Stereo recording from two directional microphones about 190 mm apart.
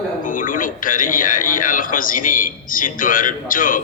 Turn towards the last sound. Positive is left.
turn(degrees=45)  # may be behind; listen again after turning